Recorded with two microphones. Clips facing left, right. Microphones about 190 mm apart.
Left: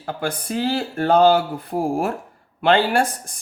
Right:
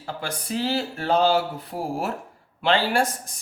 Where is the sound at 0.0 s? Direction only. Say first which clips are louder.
Left 6 dB; 55° left (ahead or behind).